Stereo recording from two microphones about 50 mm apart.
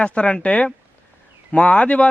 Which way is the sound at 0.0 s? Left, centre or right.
Left.